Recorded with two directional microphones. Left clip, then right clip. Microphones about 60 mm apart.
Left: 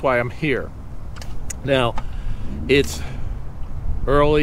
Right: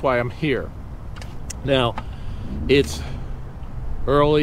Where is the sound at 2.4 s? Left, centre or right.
Left.